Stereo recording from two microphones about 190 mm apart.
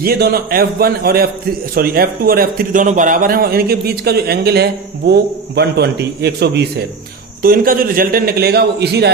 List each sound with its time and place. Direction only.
0.0 s a man's voice: 55° right (ahead or behind)
7.4 s a man's voice: 50° right (ahead or behind)